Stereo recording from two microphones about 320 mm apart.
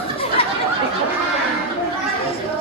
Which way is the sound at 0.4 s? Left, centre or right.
Centre.